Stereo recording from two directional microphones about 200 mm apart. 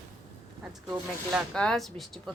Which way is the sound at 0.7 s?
5° right (ahead or behind).